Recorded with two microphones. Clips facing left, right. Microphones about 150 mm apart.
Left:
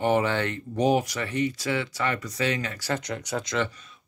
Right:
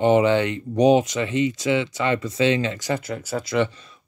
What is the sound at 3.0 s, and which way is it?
Speech, 5° right (ahead or behind).